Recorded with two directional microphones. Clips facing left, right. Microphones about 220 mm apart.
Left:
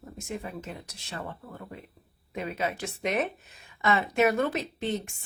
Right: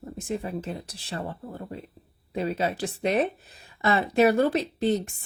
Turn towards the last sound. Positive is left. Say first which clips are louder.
# right 6 dB
turn(degrees=-35)  # may be behind; listen again after turning